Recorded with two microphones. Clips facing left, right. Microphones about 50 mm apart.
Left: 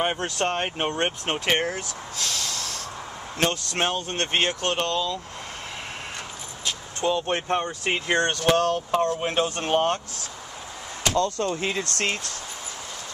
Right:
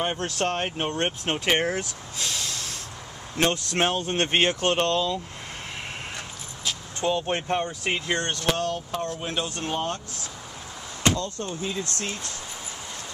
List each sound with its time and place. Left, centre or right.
0.0 s speech: centre
1.8 s speech: centre
3.7 s speech: centre
7.1 s speech: centre
7.9 s speech: left
8.3 s speech: left
11.1 s speech: left
11.9 s speech: left